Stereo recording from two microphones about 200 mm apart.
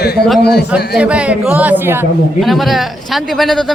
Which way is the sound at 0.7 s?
5° right (ahead or behind).